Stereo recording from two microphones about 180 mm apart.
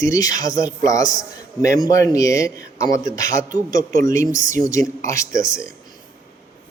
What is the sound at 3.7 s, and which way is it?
Speech, 50° right (ahead or behind).